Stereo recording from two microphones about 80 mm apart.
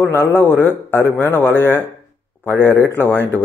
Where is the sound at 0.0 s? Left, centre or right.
Left.